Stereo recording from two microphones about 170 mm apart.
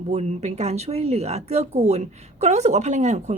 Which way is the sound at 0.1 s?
40° right (ahead or behind).